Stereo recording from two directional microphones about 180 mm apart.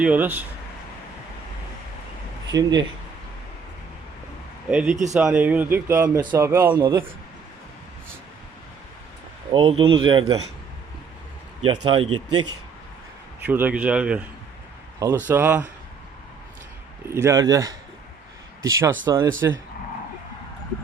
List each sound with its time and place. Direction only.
0.0 s speech: 10° right (ahead or behind)
2.5 s speech: 20° right (ahead or behind)
4.7 s speech: 5° right (ahead or behind)
9.5 s speech: 30° right (ahead or behind)
11.6 s speech: 25° right (ahead or behind)
13.4 s speech: 10° right (ahead or behind)
17.1 s speech: 15° right (ahead or behind)